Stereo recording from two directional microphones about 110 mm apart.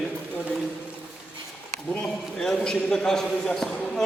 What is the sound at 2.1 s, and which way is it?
A man's voice, 5° left (ahead or behind).